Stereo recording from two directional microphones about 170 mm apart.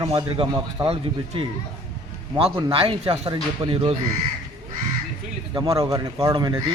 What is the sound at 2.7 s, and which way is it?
Speech, 30° right (ahead or behind).